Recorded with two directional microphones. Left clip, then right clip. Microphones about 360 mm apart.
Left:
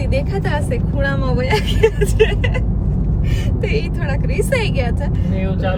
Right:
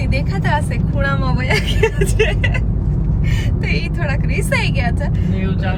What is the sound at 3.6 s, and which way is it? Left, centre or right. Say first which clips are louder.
Speech: left 1 dB; centre.